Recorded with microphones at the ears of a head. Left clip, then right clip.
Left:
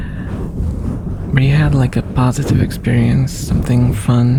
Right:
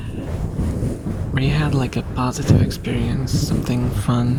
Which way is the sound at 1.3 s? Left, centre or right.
Left.